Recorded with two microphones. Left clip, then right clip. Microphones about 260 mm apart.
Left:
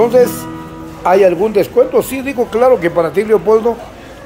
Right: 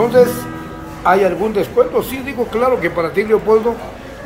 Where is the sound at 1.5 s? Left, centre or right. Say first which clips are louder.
Left 3 dB; left.